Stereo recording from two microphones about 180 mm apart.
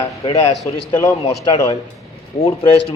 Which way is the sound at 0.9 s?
25° left (ahead or behind).